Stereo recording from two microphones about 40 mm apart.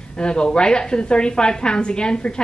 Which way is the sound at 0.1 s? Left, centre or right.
Left.